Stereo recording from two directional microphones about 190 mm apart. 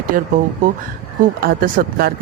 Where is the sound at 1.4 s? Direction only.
50° right (ahead or behind).